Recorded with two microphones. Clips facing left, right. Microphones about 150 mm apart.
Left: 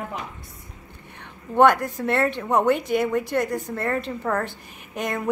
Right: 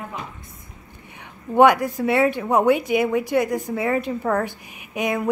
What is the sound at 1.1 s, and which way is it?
A woman's voice, 10° right (ahead or behind).